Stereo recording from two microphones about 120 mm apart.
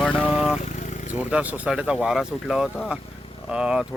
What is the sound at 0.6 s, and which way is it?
Vehicle, 85° left.